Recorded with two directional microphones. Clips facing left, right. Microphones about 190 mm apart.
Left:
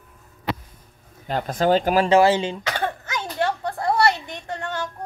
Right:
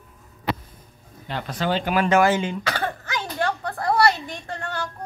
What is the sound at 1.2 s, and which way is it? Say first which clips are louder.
Speech: left 5 dB; 45° left (ahead or behind).